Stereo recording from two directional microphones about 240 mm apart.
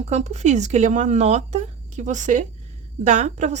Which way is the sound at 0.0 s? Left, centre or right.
Right.